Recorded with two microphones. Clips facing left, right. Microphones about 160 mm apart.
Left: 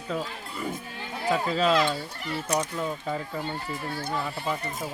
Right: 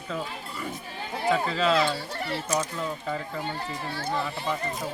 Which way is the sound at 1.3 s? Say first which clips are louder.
Even; 10° left (ahead or behind).